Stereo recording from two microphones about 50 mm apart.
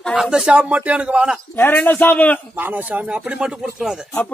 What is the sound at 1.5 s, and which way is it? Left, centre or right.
Speech, left.